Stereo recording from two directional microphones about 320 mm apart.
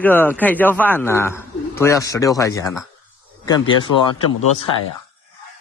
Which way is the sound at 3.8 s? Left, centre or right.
Left.